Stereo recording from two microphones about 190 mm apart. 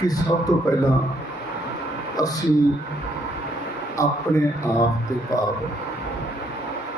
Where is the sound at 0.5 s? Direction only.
20° left (ahead or behind).